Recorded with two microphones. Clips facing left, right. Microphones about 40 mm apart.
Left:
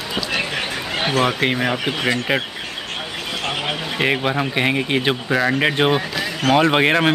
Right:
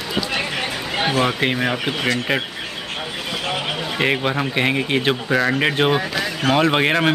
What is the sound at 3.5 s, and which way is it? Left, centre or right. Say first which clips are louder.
Speech: even; centre.